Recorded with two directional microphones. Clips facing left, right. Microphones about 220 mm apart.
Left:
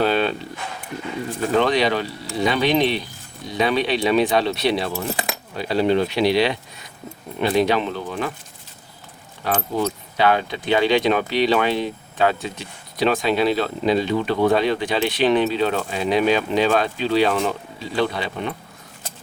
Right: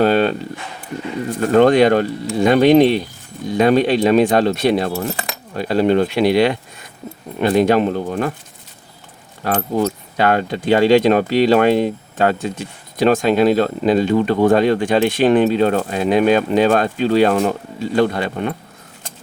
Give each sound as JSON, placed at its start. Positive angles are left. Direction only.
{"t": 0.0, "sound": "speech", "side_deg": -45}
{"t": 1.5, "sound": "speech", "side_deg": -50}
{"t": 9.4, "sound": "speech", "side_deg": -45}